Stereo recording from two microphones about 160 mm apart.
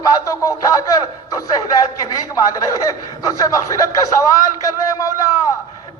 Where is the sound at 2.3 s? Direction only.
20° left (ahead or behind).